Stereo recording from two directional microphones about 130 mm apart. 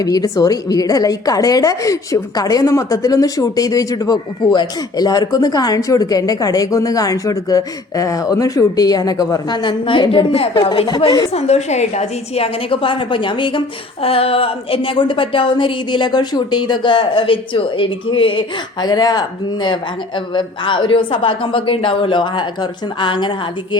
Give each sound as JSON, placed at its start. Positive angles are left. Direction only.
{"t": 0.0, "sound": "a woman's voice", "side_deg": 30}
{"t": 11.3, "sound": "a woman's voice", "side_deg": 55}